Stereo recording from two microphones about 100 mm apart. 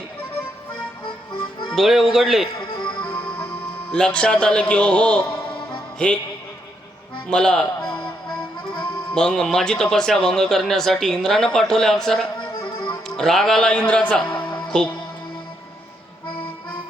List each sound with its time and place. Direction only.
1.7 s a man's voice: centre (ahead or behind)
2.6 s music: 55° left (ahead or behind)
3.1 s music: 15° left (ahead or behind)
3.9 s speech: 10° left (ahead or behind)
5.5 s music: 10° left (ahead or behind)
7.3 s music: 10° left (ahead or behind)
9.1 s a man's voice: 5° left (ahead or behind)
12.4 s music: 55° left (ahead or behind)
13.1 s speech: 5° left (ahead or behind)
14.3 s music: 50° left (ahead or behind)